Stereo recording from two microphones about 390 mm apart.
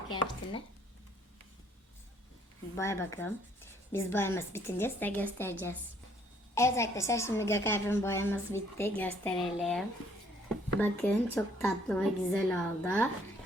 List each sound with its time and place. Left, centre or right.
2.7 s a woman's voice: centre